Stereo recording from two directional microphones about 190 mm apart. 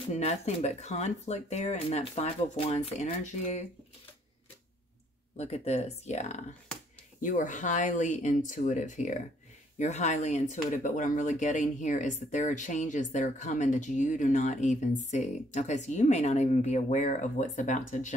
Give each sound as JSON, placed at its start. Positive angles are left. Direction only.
{"t": 0.1, "sound": "speech", "side_deg": 35}
{"t": 5.4, "sound": "speech", "side_deg": 35}